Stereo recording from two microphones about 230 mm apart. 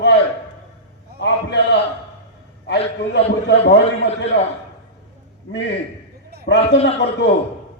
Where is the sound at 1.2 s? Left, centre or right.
Left.